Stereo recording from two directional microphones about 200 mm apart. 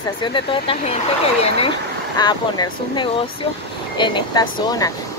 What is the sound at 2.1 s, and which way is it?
Speech, 20° left (ahead or behind).